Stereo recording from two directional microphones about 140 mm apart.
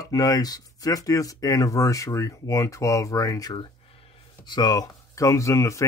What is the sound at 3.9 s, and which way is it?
Speech, 40° left (ahead or behind).